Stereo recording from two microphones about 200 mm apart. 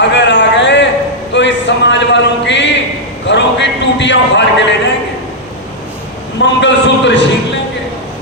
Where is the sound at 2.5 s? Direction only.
60° left (ahead or behind).